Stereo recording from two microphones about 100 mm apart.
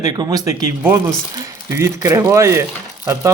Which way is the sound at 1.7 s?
30° right (ahead or behind).